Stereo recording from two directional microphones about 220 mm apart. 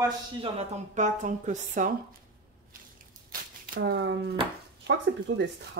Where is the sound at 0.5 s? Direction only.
35° right (ahead or behind).